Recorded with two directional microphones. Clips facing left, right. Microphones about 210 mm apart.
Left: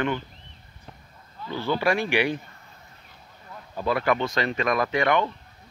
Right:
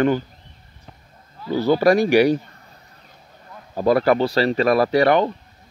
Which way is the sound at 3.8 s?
40° right (ahead or behind).